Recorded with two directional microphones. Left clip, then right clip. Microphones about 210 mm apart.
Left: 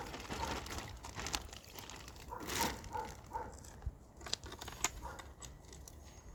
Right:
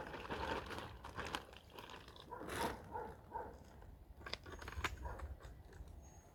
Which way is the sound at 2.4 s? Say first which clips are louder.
Left 5 dB; 55° left (ahead or behind).